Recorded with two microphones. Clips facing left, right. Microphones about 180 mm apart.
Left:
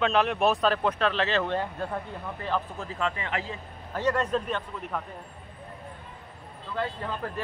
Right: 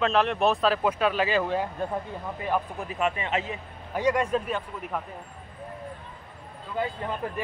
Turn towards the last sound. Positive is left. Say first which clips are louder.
# right 2 dB
turn(degrees=-15)  # may be behind; listen again after turning